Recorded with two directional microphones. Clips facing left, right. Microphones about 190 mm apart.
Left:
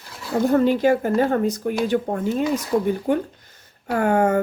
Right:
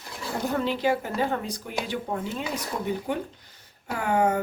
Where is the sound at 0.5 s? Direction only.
50° left (ahead or behind).